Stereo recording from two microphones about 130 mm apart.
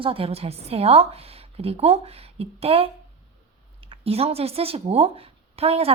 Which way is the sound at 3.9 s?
50° right (ahead or behind).